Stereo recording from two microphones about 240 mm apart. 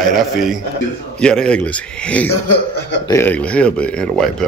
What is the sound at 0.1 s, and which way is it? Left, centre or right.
Speech, centre.